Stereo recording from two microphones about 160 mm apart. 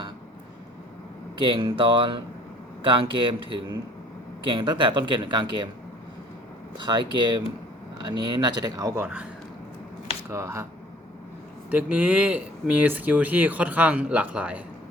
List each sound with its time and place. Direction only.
1.4 s speech: 30° right (ahead or behind)
6.7 s speech: 30° right (ahead or behind)
10.2 s speech: 15° right (ahead or behind)
11.7 s speech: 10° right (ahead or behind)